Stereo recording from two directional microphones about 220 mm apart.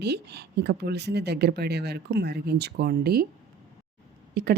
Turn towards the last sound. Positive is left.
turn(degrees=-45)  # may be behind; listen again after turning